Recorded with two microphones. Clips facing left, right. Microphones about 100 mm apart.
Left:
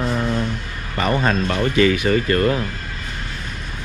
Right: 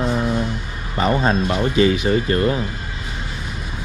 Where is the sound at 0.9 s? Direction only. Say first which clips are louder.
Right 1 dB; 25° right (ahead or behind).